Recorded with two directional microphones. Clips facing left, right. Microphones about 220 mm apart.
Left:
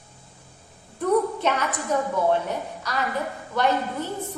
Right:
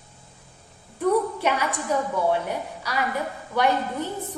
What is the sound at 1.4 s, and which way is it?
Speech, 10° right (ahead or behind).